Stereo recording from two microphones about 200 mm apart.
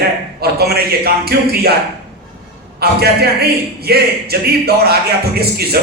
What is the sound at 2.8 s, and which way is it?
A man's voice, 50° right (ahead or behind).